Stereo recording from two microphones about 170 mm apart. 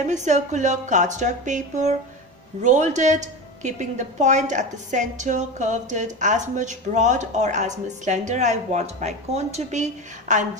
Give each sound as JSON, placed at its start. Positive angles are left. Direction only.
{"t": 0.0, "sound": "a woman's voice", "side_deg": -45}